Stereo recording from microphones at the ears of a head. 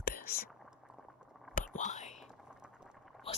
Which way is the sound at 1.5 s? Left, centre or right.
Left.